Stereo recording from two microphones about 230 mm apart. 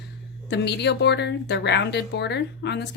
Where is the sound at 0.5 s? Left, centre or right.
Left.